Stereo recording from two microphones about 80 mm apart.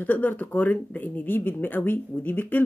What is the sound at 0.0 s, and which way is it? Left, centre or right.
Speech, left.